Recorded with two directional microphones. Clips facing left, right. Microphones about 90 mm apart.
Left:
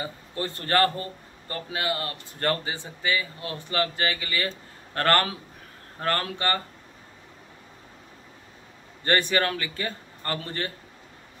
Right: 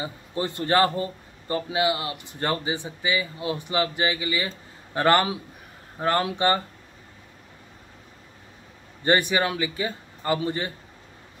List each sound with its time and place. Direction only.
0.0 s a man's voice: 20° right (ahead or behind)
9.0 s a man's voice: 15° right (ahead or behind)